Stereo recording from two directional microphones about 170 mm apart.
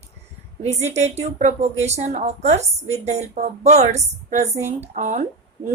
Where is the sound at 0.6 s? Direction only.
40° right (ahead or behind).